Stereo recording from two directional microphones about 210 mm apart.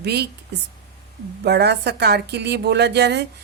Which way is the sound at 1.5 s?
50° right (ahead or behind).